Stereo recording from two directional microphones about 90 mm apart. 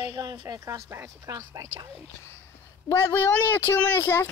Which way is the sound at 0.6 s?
30° right (ahead or behind).